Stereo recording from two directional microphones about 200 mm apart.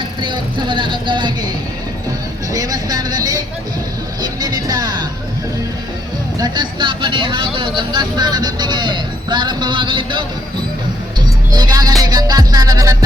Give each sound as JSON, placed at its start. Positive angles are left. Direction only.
{"t": 0.2, "sound": "speech", "side_deg": -25}
{"t": 2.5, "sound": "speech", "side_deg": -20}
{"t": 6.4, "sound": "speech", "side_deg": -20}
{"t": 11.5, "sound": "music", "side_deg": -20}
{"t": 12.0, "sound": "speech", "side_deg": -20}